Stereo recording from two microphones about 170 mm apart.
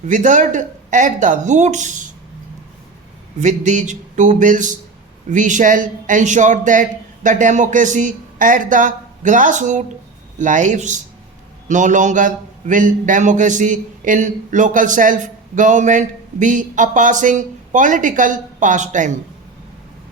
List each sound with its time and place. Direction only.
0.0 s a man's voice: 45° right (ahead or behind)
3.4 s a man's voice: 45° right (ahead or behind)